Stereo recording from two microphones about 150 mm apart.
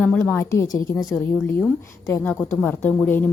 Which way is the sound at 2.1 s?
10° left (ahead or behind).